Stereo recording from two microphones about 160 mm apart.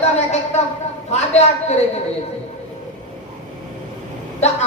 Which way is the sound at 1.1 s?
45° left (ahead or behind).